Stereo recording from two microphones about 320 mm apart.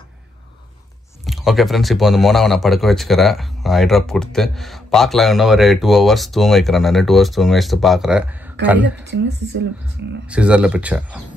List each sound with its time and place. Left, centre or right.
1.2 s speech: centre
9.0 s speech: right
10.2 s speech: centre